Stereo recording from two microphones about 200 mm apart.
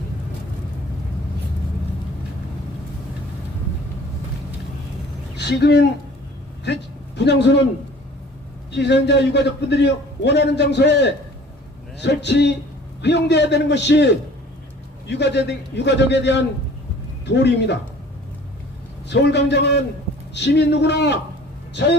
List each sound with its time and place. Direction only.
5.4 s speech: 55° left (ahead or behind)
7.2 s a man's voice: 60° left (ahead or behind)
8.7 s a man's voice: 60° left (ahead or behind)
19.0 s a man's voice: 60° left (ahead or behind)